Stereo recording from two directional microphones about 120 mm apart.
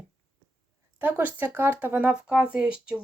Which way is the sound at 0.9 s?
15° right (ahead or behind).